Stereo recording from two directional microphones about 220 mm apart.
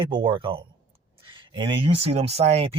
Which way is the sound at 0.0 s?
20° right (ahead or behind).